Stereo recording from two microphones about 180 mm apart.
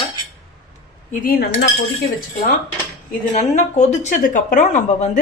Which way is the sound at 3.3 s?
40° left (ahead or behind).